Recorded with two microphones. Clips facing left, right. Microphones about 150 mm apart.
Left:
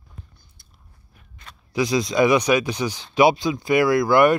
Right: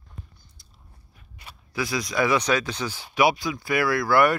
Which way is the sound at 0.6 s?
55° left (ahead or behind).